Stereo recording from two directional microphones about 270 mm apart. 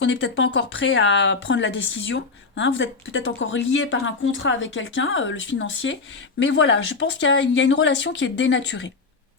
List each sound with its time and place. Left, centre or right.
0.0 s speech: left